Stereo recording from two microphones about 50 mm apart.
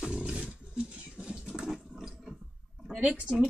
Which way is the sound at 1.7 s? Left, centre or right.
Centre.